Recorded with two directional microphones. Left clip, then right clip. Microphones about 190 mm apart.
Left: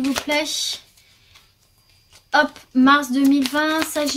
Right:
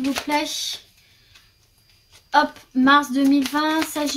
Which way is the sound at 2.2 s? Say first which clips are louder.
Left 1 dB; 40° left (ahead or behind).